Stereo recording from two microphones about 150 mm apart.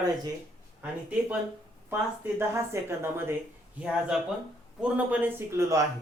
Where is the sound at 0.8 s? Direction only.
10° right (ahead or behind).